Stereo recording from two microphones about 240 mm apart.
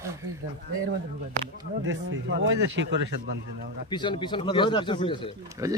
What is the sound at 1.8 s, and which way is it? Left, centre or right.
A man's voice, right.